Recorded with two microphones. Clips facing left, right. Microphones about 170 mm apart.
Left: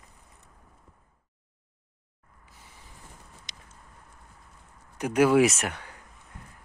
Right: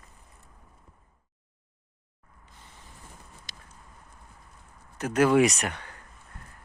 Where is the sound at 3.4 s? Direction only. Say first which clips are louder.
Right 1 dB; 20° left (ahead or behind).